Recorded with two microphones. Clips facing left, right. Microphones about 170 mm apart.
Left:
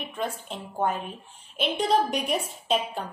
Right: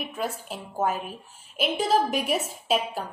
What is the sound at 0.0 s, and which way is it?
A woman's voice, 5° right (ahead or behind).